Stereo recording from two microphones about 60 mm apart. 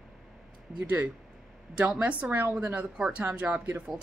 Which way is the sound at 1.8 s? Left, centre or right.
Right.